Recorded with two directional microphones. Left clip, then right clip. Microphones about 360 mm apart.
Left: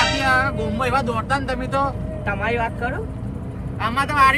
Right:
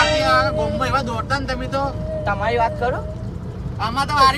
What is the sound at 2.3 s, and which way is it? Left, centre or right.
Speech, centre.